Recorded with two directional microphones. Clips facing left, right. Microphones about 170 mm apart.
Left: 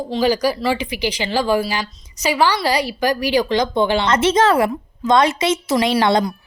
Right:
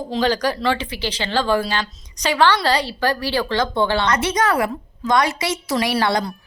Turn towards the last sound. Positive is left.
turn(degrees=20)  # may be behind; listen again after turning